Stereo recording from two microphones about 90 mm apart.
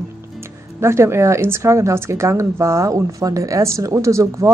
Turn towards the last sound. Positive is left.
turn(degrees=-35)  # may be behind; listen again after turning